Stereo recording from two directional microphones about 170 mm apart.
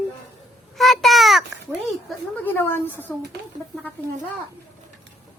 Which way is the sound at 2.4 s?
10° left (ahead or behind).